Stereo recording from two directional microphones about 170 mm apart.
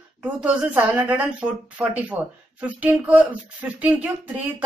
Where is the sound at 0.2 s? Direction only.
5° right (ahead or behind).